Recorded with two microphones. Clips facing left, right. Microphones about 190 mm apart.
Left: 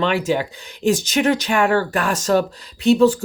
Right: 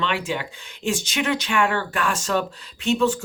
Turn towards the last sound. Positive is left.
turn(degrees=35)  # may be behind; listen again after turning